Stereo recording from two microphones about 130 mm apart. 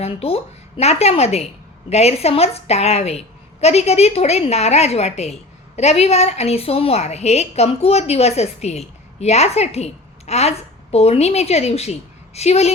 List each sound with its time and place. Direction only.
0.0 s a woman's voice: 50° left (ahead or behind)